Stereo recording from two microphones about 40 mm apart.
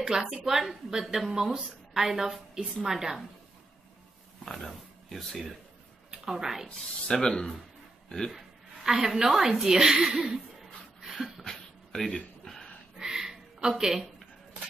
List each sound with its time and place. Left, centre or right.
0.0 s a woman's voice: centre
4.5 s speech: centre
6.2 s a woman's voice: centre
6.7 s speech: centre
8.3 s a woman's voice: centre
9.9 s speech: right
10.2 s a sound: centre
11.4 s a sound: centre
13.0 s a sound: centre